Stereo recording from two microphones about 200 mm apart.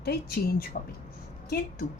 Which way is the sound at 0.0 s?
50° left (ahead or behind).